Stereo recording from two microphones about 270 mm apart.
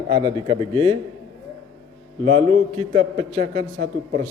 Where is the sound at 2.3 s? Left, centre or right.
Right.